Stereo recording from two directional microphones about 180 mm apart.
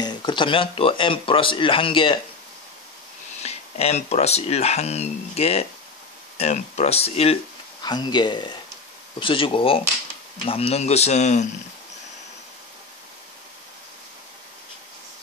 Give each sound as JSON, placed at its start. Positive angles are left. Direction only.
{"t": 0.0, "sound": "speech", "side_deg": 25}
{"t": 3.4, "sound": "speech", "side_deg": 35}
{"t": 7.8, "sound": "speech", "side_deg": 25}